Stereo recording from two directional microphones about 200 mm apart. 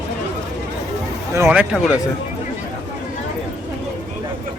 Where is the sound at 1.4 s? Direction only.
5° right (ahead or behind).